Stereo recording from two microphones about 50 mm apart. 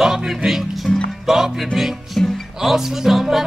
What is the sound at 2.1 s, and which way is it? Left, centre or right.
Music, centre.